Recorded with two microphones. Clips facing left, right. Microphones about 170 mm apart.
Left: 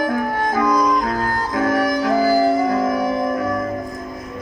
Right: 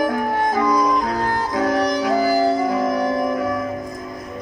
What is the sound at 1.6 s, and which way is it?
Music, 50° left (ahead or behind).